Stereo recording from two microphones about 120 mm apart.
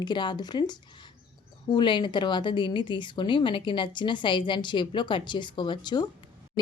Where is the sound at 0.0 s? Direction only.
40° left (ahead or behind).